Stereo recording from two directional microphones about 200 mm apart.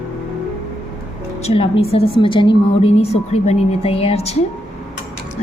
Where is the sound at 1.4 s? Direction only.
30° left (ahead or behind).